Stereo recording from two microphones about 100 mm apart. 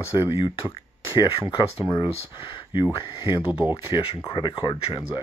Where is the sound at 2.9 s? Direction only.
55° left (ahead or behind).